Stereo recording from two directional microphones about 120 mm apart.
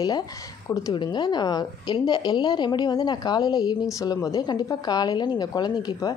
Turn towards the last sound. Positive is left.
turn(degrees=35)  # may be behind; listen again after turning